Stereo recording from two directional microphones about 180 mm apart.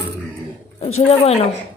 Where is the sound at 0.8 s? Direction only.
35° left (ahead or behind).